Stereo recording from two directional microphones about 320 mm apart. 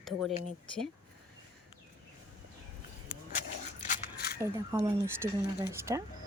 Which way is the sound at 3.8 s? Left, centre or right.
Left.